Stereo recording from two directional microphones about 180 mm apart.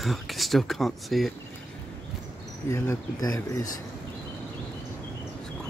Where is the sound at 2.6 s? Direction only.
15° left (ahead or behind).